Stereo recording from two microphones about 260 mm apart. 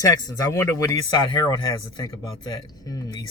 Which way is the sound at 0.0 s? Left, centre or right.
Centre.